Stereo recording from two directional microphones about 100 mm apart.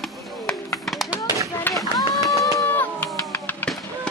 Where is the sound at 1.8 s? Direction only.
Centre (ahead or behind).